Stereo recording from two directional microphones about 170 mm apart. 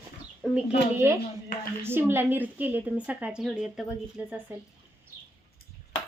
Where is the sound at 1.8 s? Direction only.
15° right (ahead or behind).